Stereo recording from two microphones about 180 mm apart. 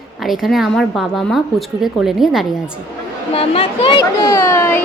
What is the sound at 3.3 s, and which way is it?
Speech, 35° left (ahead or behind).